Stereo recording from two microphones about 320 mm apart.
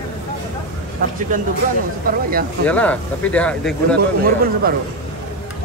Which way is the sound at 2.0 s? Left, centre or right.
Right.